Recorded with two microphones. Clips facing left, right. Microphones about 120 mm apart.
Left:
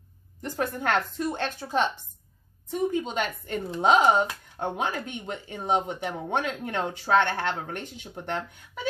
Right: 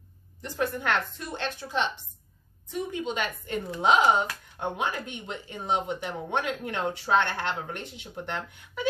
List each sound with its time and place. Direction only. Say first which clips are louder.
0.4 s a woman's voice: even; 45° left (ahead or behind)